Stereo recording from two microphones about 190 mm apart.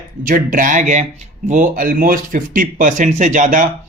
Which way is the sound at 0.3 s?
45° right (ahead or behind).